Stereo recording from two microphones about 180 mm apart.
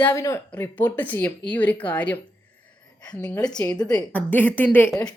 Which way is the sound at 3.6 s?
20° left (ahead or behind).